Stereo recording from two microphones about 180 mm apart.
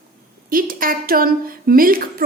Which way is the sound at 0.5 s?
50° right (ahead or behind).